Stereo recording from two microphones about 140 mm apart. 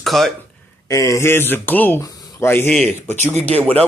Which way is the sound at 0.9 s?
20° left (ahead or behind).